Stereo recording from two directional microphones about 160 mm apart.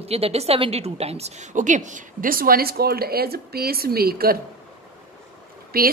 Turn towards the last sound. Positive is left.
turn(degrees=-70)  # may be behind; listen again after turning